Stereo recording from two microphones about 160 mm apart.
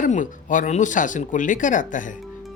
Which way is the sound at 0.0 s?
55° left (ahead or behind).